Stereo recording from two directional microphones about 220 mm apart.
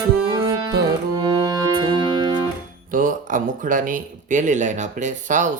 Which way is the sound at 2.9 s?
35° right (ahead or behind).